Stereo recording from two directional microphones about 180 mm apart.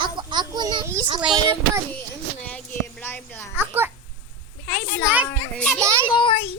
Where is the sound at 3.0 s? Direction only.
10° left (ahead or behind).